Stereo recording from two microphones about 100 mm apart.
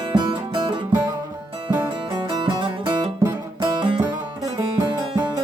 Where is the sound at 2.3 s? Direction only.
50° right (ahead or behind).